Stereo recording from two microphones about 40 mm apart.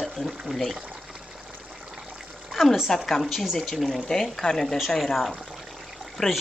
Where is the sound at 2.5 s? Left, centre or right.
Centre.